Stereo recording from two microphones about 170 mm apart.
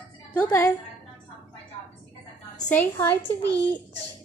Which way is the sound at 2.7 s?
10° left (ahead or behind).